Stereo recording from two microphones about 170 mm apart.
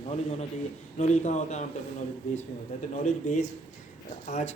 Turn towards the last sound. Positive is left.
turn(degrees=40)  # may be behind; listen again after turning